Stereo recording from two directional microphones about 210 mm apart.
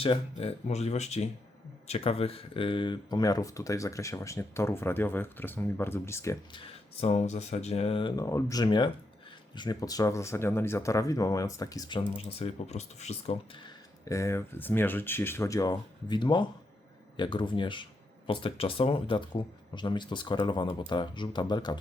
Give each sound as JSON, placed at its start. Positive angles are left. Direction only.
{"t": 0.0, "sound": "speech", "side_deg": 25}
{"t": 6.6, "sound": "speech", "side_deg": 30}